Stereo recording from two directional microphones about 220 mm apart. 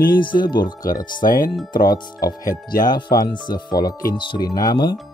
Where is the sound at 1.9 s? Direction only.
20° left (ahead or behind).